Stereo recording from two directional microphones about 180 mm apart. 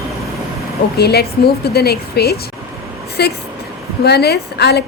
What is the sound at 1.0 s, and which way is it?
A woman's voice, 65° left (ahead or behind).